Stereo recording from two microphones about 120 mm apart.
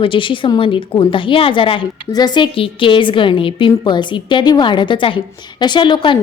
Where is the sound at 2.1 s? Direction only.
35° left (ahead or behind).